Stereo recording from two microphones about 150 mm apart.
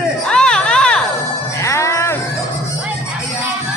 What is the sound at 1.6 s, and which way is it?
Music, 20° left (ahead or behind).